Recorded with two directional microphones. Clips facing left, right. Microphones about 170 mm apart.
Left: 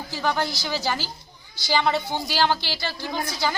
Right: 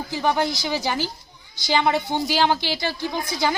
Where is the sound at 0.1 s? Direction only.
15° right (ahead or behind).